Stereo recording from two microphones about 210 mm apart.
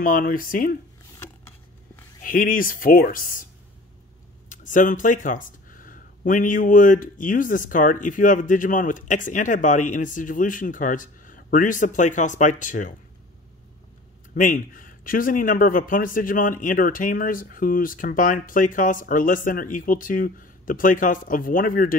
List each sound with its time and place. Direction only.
0.0 s speech: 40° left (ahead or behind)
2.2 s speech: 40° left (ahead or behind)
4.5 s speech: 40° left (ahead or behind)
14.3 s speech: 40° left (ahead or behind)